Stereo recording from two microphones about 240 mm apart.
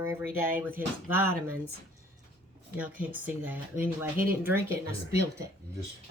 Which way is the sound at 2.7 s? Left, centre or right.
Centre.